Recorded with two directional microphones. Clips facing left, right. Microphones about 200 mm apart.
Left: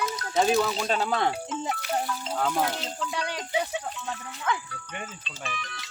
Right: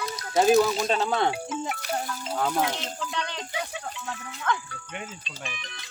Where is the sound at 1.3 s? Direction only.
10° right (ahead or behind); by 4.6 s 10° left (ahead or behind).